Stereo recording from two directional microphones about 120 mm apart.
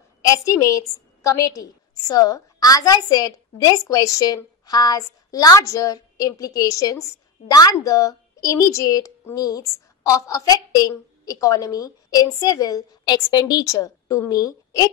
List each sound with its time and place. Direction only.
0.3 s a woman's voice: 25° left (ahead or behind)